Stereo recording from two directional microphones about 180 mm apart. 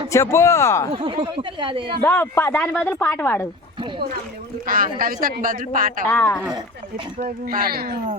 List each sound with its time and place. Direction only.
0.1 s speech: 15° left (ahead or behind)
0.9 s speech: 30° right (ahead or behind)
2.0 s speech: 10° left (ahead or behind)
4.6 s speech: 50° right (ahead or behind)
6.1 s speech: 15° left (ahead or behind)
7.4 s speech: 55° right (ahead or behind)